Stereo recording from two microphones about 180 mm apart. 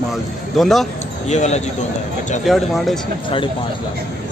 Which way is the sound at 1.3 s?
40° left (ahead or behind).